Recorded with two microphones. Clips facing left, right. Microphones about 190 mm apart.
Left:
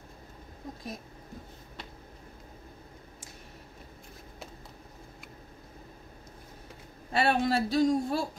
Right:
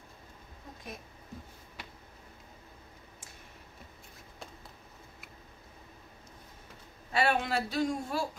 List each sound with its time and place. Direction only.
7.1 s speech: 40° left (ahead or behind)